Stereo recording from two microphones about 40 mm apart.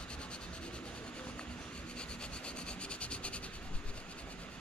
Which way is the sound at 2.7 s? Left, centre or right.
Left.